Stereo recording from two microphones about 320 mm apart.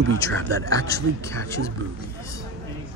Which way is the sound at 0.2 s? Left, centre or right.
Centre.